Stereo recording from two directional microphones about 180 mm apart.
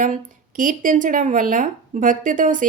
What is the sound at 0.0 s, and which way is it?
Speech, 45° right (ahead or behind).